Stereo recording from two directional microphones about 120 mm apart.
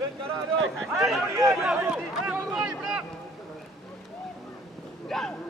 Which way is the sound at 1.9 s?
5° right (ahead or behind).